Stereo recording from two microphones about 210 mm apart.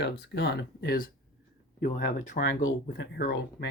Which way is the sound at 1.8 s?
35° left (ahead or behind).